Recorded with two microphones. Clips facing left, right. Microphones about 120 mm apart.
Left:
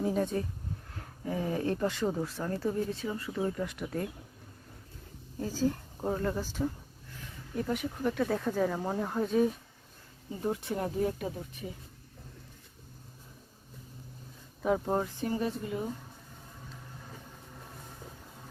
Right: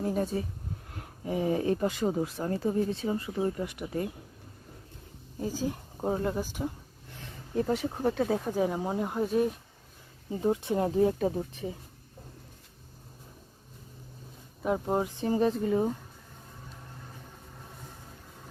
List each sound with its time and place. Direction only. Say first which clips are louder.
0.0 s speech: even; 5° right (ahead or behind)
1.2 s speech: right 4 dB; 15° right (ahead or behind)
3.6 s speech: right 2 dB; 10° right (ahead or behind)
5.4 s speech: left 1 dB; 15° right (ahead or behind)
7.3 s a sound: right 4 dB; 30° right (ahead or behind)
7.9 s speech: right 3 dB; 40° right (ahead or behind)
8.3 s speech: right 2 dB; 20° right (ahead or behind)
10.3 s speech: right 5 dB; 20° right (ahead or behind)
14.6 s speech: right 1 dB; 5° right (ahead or behind)
15.0 s speech: right 4 dB; 20° right (ahead or behind)
15.4 s speech: right 7 dB; 35° right (ahead or behind)